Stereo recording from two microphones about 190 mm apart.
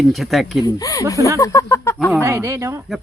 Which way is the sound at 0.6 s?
20° left (ahead or behind).